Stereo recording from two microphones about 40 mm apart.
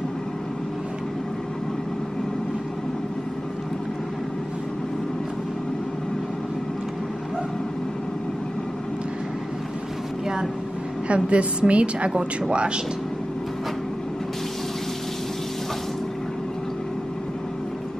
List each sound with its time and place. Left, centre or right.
11.1 s a woman's voice: right